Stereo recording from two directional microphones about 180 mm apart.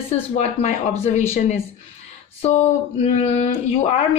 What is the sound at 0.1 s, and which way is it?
Speech, 40° left (ahead or behind).